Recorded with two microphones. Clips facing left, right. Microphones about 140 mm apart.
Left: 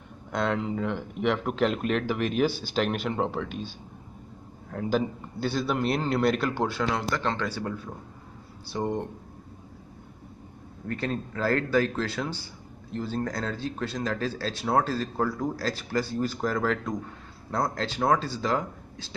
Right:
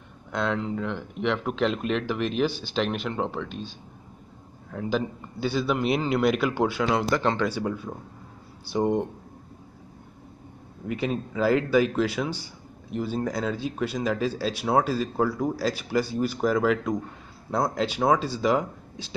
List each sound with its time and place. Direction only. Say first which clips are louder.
0.3 s speech: even; centre (ahead or behind)
4.6 s a man's voice: left 1 dB; centre (ahead or behind); by 9.0 s 15° right (ahead or behind)
10.9 s speech: right 3 dB; 10° right (ahead or behind)